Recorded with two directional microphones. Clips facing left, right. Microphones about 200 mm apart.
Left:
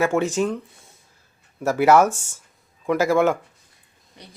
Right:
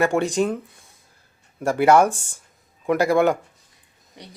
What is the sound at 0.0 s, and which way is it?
Speech, centre (ahead or behind).